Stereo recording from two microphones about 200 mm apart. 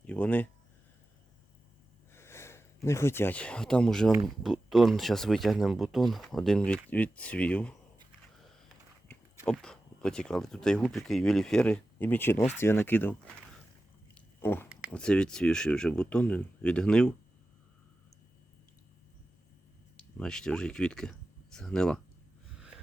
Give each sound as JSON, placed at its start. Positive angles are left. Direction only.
{"t": 0.1, "sound": "speech", "side_deg": 5}
{"t": 2.1, "sound": "speech", "side_deg": 15}
{"t": 9.5, "sound": "speech", "side_deg": 5}
{"t": 20.1, "sound": "speech", "side_deg": 5}